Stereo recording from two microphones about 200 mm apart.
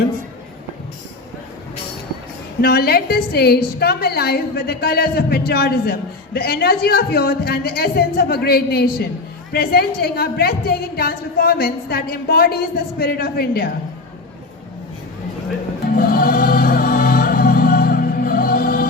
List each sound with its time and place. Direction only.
2.6 s a woman's voice: 50° left (ahead or behind)
16.0 s music: 45° left (ahead or behind)